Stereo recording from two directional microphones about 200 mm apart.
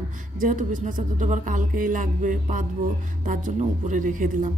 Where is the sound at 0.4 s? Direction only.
40° right (ahead or behind).